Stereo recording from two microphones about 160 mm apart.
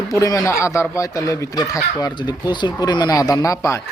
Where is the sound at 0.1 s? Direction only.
20° left (ahead or behind).